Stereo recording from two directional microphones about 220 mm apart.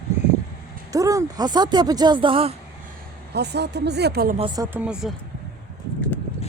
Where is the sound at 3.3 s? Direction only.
50° right (ahead or behind).